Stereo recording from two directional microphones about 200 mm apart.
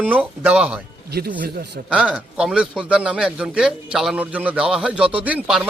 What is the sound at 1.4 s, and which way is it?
Speech, 50° right (ahead or behind).